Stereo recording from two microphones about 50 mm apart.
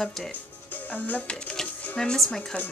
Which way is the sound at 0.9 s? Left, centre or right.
Left.